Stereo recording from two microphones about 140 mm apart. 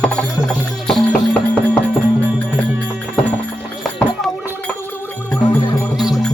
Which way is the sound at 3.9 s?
5° left (ahead or behind).